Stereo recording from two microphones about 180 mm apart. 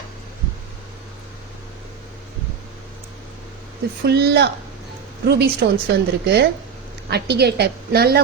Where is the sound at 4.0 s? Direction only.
65° right (ahead or behind).